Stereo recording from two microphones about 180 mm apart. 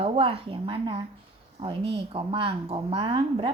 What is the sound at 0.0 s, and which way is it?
A woman's voice, 30° right (ahead or behind).